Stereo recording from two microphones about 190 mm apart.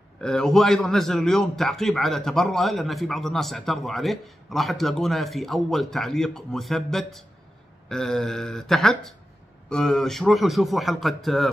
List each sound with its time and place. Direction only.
0.2 s a man's voice: 5° left (ahead or behind)